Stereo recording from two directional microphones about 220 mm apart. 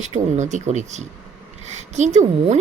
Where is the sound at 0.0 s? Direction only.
30° right (ahead or behind).